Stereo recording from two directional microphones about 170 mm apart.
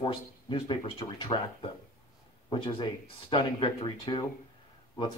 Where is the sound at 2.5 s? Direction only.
30° left (ahead or behind).